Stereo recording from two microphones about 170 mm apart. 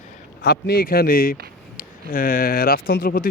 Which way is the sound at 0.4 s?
65° left (ahead or behind).